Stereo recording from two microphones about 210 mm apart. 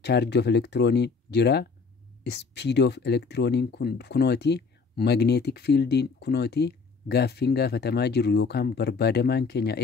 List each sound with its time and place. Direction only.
0.0 s speech: 50° left (ahead or behind)